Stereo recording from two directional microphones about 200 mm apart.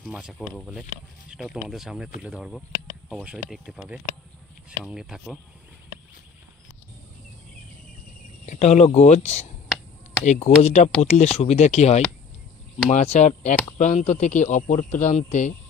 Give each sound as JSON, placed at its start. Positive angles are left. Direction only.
{"t": 0.0, "sound": "speech", "side_deg": 0}
{"t": 8.5, "sound": "speech", "side_deg": 35}